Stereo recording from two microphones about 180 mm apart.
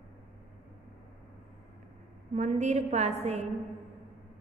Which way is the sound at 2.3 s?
40° right (ahead or behind).